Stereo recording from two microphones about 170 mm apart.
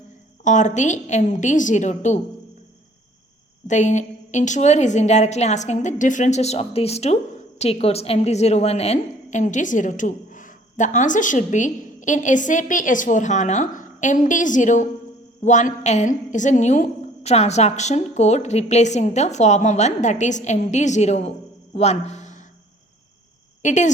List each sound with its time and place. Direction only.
0.4 s a woman's voice: 45° left (ahead or behind)
3.7 s a woman's voice: 45° left (ahead or behind)
23.6 s a woman's voice: 45° left (ahead or behind)